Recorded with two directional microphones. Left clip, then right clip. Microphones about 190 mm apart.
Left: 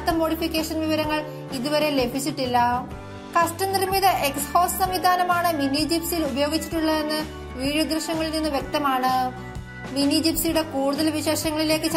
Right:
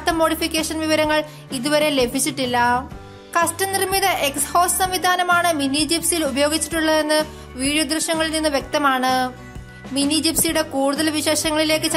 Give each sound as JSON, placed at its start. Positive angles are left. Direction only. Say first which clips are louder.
{"t": 0.0, "sound": "a woman's voice", "louder": "right 4 dB", "side_deg": -35}
{"t": 3.9, "sound": "a woman's voice", "louder": "even", "side_deg": -30}